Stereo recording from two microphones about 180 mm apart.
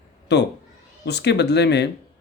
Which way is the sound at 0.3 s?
70° left (ahead or behind).